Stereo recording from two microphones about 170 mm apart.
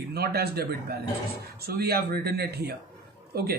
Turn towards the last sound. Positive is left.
turn(degrees=-65)  # may be behind; listen again after turning